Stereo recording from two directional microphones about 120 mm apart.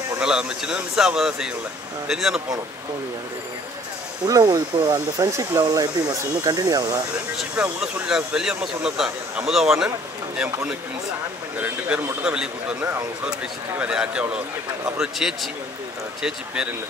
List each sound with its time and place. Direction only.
0.2 s speech: 5° right (ahead or behind)
4.3 s speech: 30° right (ahead or behind)
7.8 s speech: 5° right (ahead or behind)
13.7 s speech: 5° right (ahead or behind)